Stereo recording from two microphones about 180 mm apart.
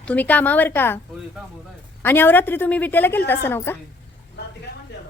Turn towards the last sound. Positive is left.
turn(degrees=10)  # may be behind; listen again after turning